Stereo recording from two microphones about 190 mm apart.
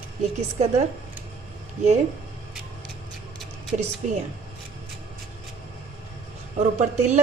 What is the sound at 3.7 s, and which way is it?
Speech, 40° right (ahead or behind).